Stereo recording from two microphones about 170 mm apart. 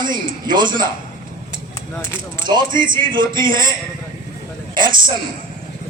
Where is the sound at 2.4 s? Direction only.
25° right (ahead or behind).